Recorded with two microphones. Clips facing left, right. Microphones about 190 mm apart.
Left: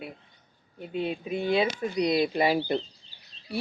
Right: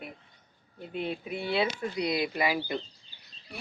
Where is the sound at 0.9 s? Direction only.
15° left (ahead or behind); by 2.8 s 30° left (ahead or behind).